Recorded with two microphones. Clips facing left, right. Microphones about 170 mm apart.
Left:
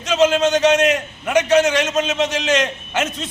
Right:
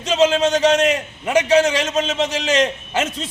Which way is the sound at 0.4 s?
35° right (ahead or behind).